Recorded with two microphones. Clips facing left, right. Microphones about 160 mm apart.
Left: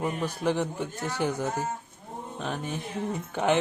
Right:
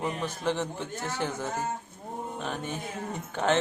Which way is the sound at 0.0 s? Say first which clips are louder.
Left 2 dB; 10° left (ahead or behind).